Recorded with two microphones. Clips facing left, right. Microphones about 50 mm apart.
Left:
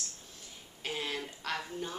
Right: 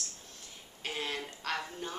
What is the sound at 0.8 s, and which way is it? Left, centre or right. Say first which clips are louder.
Speech: even; centre.